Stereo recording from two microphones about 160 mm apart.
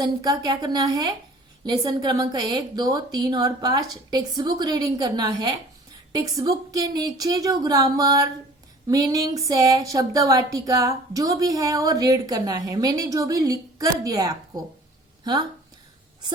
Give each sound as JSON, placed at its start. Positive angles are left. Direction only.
{"t": 0.0, "sound": "a woman's voice", "side_deg": -25}